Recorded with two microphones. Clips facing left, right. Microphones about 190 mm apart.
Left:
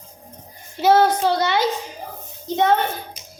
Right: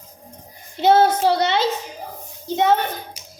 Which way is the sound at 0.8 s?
20° right (ahead or behind).